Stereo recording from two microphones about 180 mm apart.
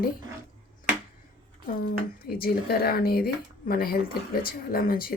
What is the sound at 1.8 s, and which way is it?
Speech, 55° left (ahead or behind).